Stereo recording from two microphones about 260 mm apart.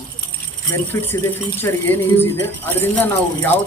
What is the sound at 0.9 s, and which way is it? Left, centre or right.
Speech, centre.